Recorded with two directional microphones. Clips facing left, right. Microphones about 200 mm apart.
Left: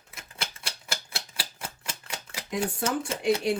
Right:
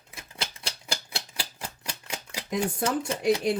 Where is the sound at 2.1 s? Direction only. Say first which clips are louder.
Right 3 dB; 25° right (ahead or behind).